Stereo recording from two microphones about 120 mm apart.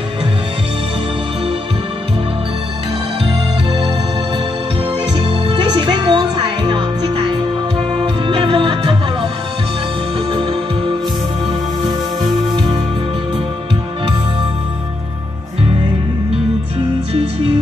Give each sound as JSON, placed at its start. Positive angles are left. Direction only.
{"t": 5.2, "sound": "music", "side_deg": -45}